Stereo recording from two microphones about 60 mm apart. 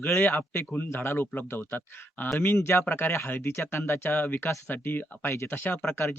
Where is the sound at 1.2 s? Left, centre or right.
Left.